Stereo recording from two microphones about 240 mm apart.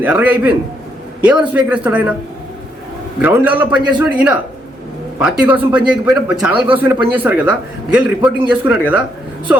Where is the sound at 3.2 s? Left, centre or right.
Centre.